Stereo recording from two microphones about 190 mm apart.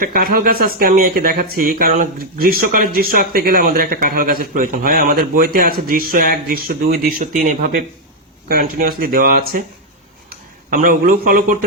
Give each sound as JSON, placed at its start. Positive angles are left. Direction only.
{"t": 0.0, "sound": "speech", "side_deg": -50}